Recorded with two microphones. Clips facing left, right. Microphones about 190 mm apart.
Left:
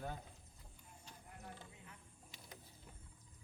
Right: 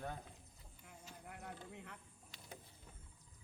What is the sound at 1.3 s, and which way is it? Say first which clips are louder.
Speech: right 4 dB; 70° right (ahead or behind).